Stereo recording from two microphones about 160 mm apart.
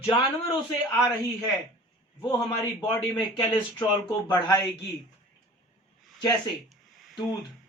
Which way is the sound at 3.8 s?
25° left (ahead or behind).